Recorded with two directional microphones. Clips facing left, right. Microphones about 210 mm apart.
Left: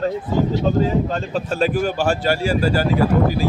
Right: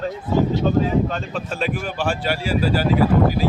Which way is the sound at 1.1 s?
35° left (ahead or behind).